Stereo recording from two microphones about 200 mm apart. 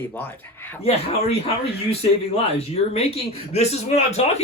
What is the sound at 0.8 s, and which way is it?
Speech, 30° left (ahead or behind).